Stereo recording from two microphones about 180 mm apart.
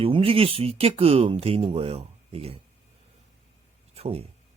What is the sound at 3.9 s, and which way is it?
Speech, 35° right (ahead or behind).